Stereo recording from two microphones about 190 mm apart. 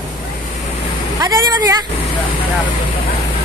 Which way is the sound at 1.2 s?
15° right (ahead or behind).